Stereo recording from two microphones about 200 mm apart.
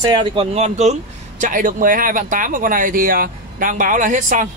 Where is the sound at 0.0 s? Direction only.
25° right (ahead or behind).